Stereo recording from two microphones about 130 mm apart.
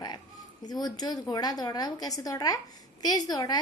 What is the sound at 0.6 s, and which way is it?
A woman's voice, 30° left (ahead or behind).